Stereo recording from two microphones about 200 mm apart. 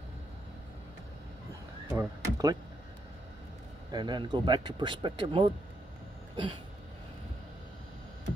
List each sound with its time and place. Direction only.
1.9 s speech: 15° right (ahead or behind)
3.9 s speech: 20° right (ahead or behind)
6.3 s a sound: 25° right (ahead or behind)